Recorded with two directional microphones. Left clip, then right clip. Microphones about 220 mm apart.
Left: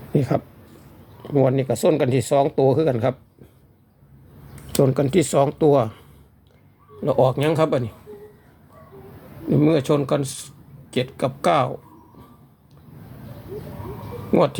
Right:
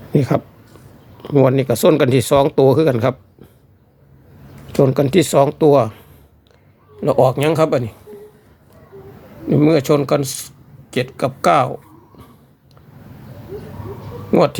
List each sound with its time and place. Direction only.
0.1 s speech: 15° right (ahead or behind)
4.8 s speech: 10° right (ahead or behind)
9.5 s speech: 15° right (ahead or behind)
14.3 s a sound: 15° right (ahead or behind)